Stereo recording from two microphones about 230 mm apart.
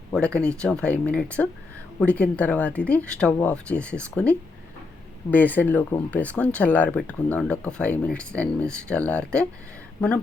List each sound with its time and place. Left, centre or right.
0.1 s speech: centre